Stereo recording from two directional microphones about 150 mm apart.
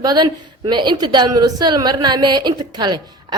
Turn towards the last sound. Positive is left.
turn(degrees=-30)  # may be behind; listen again after turning